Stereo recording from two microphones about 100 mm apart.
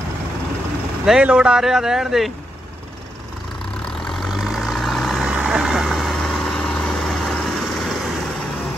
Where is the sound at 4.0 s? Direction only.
Centre (ahead or behind).